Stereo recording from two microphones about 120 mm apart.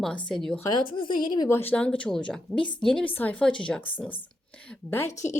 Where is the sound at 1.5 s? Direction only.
20° left (ahead or behind).